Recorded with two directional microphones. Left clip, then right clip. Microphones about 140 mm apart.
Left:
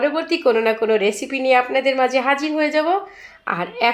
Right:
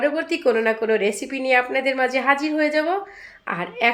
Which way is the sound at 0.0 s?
10° left (ahead or behind).